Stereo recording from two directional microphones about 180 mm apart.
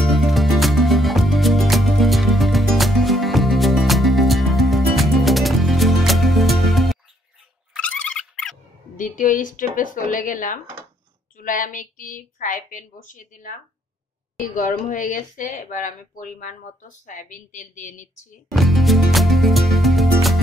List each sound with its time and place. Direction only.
0.0 s music: centre (ahead or behind)
7.7 s a sound: 5° left (ahead or behind)
8.9 s speech: 45° left (ahead or behind)
18.5 s music: centre (ahead or behind)